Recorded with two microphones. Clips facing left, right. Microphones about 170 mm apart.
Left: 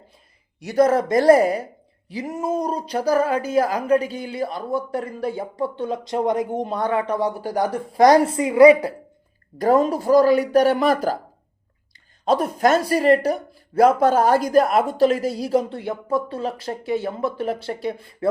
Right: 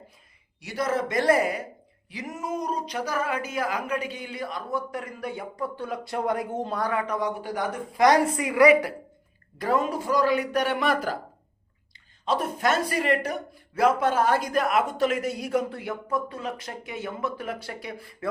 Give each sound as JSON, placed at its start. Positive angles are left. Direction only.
{"t": 0.6, "sound": "speech", "side_deg": 45}
{"t": 9.6, "sound": "speech", "side_deg": 40}
{"t": 12.2, "sound": "speech", "side_deg": 40}